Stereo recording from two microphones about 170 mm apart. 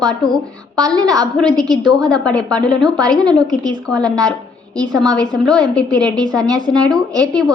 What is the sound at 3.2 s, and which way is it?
A woman's voice, 25° right (ahead or behind).